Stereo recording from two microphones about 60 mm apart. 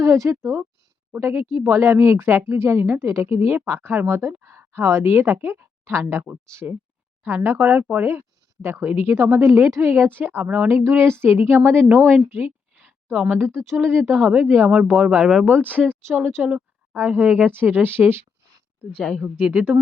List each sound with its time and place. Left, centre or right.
0.0 s speech: right
1.2 s speech: right
10.7 s speech: right
12.4 s a sound: right
13.5 s speech: right
13.8 s speech: right
14.9 s speech: centre
15.4 s speech: right
19.2 s speech: right